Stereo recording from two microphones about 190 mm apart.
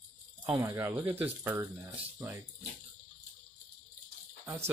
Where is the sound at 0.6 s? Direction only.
10° right (ahead or behind).